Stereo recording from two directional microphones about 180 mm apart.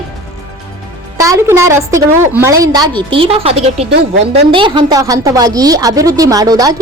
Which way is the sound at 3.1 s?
30° right (ahead or behind).